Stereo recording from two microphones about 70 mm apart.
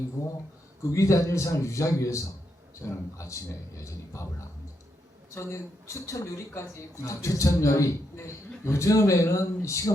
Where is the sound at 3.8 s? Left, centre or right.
Left.